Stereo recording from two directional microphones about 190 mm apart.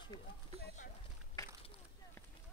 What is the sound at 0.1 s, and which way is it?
Speech, 20° left (ahead or behind).